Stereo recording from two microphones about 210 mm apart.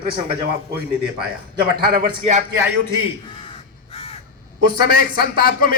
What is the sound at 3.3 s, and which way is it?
Crow, 25° left (ahead or behind).